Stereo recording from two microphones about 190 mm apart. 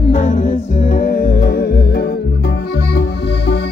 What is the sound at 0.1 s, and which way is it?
Music, 40° left (ahead or behind).